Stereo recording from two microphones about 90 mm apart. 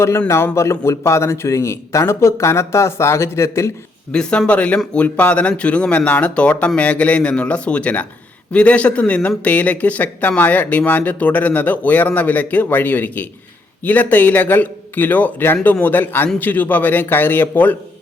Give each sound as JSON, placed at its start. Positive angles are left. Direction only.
{"t": 0.5, "sound": "speech", "side_deg": 30}
{"t": 4.1, "sound": "a man's voice", "side_deg": 10}